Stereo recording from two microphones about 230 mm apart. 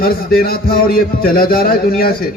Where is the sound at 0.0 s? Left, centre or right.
Left.